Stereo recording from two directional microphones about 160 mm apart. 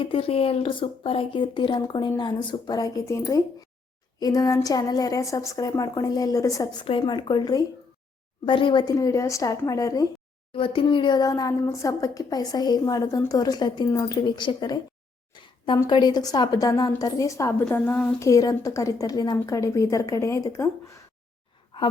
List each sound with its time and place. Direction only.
0.0 s a woman's voice: 35° left (ahead or behind)
10.5 s a woman's voice: 35° left (ahead or behind)
15.3 s a sound: 30° left (ahead or behind)
15.8 s a woman's voice: 25° left (ahead or behind); by 18.1 s 10° left (ahead or behind)
18.2 s a woman's voice: 20° left (ahead or behind)
21.7 s a sound: 30° left (ahead or behind)